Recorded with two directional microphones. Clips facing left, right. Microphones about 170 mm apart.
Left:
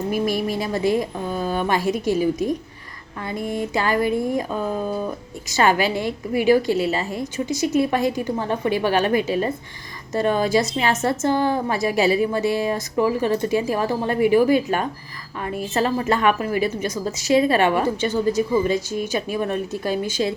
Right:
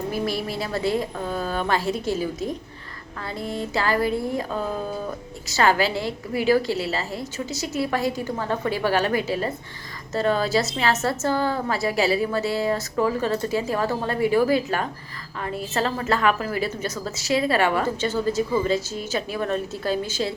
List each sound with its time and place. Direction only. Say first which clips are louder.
0.1 s a woman's voice: left 7 dB; 15° left (ahead or behind)
3.2 s a woman's voice: left 4 dB; 15° left (ahead or behind)
5.5 s a woman's voice: left 2 dB; 20° left (ahead or behind)